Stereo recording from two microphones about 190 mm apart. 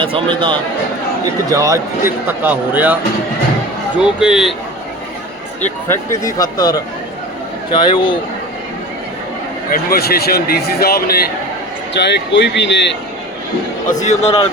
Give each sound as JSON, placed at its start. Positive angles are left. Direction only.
{"t": 0.0, "sound": "a man's voice", "side_deg": -25}
{"t": 5.6, "sound": "speech", "side_deg": 15}
{"t": 9.6, "sound": "speech", "side_deg": 50}
{"t": 13.8, "sound": "speech", "side_deg": 40}